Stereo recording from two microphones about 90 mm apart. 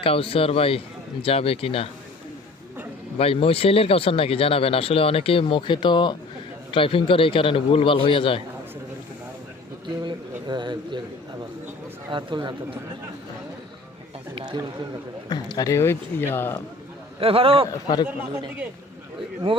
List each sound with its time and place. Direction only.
0.0 s speech: 90° left
3.2 s speech: 90° left; by 6.1 s 60° left (ahead or behind)
6.7 s a man's voice: 80° left
10.0 s speech: 55° right (ahead or behind)
12.1 s speech: 55° right (ahead or behind)
15.3 s a man's voice: 45° left (ahead or behind); by 16.6 s 25° left (ahead or behind)
17.2 s a man's voice: 90° right
17.7 s a man's voice: 50° left (ahead or behind)